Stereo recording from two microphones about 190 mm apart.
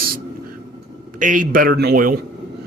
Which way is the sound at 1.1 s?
45° right (ahead or behind).